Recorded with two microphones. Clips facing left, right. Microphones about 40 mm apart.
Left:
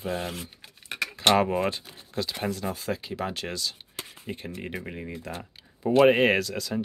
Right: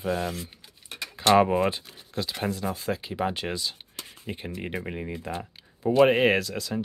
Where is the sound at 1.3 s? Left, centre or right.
Centre.